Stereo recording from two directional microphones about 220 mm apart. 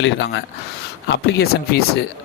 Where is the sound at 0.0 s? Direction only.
55° left (ahead or behind).